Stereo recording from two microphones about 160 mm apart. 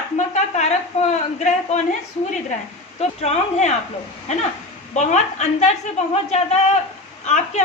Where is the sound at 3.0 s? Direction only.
45° left (ahead or behind).